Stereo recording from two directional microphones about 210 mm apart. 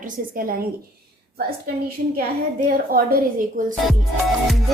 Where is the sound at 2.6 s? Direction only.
45° right (ahead or behind).